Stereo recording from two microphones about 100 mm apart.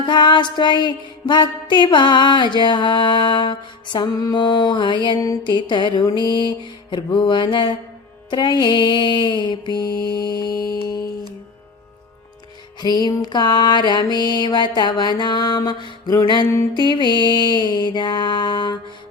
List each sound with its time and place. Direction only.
0.0 s music: 50° left (ahead or behind)
12.8 s music: 45° left (ahead or behind)